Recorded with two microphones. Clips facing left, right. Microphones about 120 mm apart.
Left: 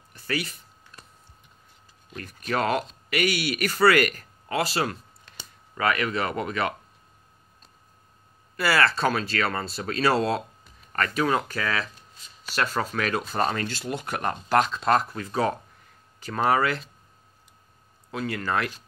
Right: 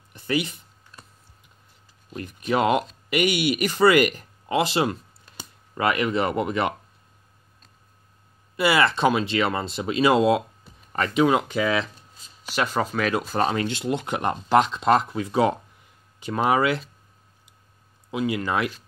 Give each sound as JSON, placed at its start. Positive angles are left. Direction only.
{"t": 0.1, "sound": "a sound", "side_deg": -20}
{"t": 2.1, "sound": "speech", "side_deg": -15}
{"t": 5.8, "sound": "speech", "side_deg": -20}
{"t": 8.5, "sound": "speech", "side_deg": -20}
{"t": 18.1, "sound": "speech", "side_deg": -15}